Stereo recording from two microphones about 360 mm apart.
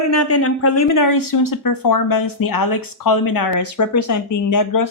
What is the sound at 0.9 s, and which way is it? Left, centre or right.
Speech, left.